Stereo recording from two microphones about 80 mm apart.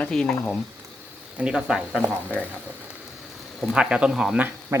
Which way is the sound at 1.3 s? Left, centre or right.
Centre.